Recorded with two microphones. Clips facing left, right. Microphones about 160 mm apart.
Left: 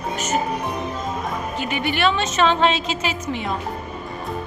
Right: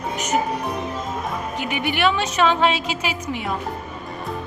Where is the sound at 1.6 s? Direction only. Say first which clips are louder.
Even; 15° right (ahead or behind).